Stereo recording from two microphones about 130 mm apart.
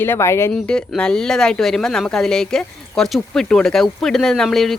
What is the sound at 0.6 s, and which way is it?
Speech, 5° left (ahead or behind).